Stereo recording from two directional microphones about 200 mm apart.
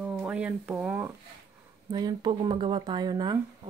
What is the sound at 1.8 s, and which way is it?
Speech, 20° right (ahead or behind).